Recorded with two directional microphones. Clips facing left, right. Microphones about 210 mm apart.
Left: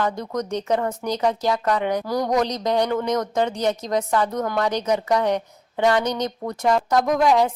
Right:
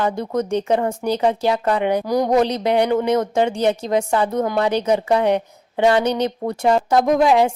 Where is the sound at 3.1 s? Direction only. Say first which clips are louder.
Right 4 dB; 30° right (ahead or behind).